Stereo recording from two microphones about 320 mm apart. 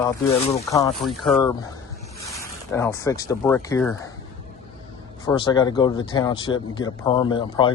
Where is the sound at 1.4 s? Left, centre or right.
Centre.